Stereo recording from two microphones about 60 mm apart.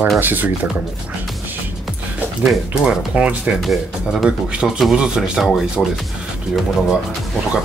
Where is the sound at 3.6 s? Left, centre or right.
Centre.